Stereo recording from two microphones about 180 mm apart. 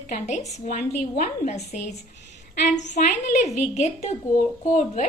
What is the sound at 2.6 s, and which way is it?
A woman's voice, 40° left (ahead or behind).